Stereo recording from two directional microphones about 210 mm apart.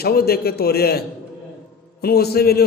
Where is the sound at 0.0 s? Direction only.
50° left (ahead or behind).